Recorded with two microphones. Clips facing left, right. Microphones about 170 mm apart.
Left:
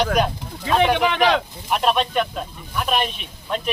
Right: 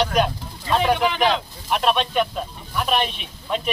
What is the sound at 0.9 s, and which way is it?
Speech, 70° left (ahead or behind).